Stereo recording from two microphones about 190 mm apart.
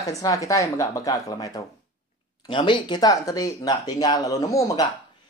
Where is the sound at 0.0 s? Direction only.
15° left (ahead or behind).